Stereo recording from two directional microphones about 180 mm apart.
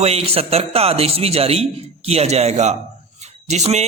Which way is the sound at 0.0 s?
35° right (ahead or behind).